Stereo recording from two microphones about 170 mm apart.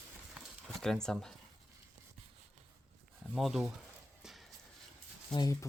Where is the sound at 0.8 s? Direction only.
5° left (ahead or behind).